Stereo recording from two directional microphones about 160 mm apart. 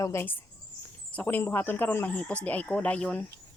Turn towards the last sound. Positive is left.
turn(degrees=5)  # may be behind; listen again after turning